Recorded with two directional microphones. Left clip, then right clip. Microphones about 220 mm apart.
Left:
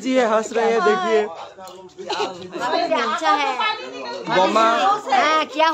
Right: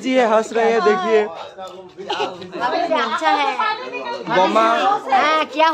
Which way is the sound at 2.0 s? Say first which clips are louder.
Right 1 dB; 15° left (ahead or behind).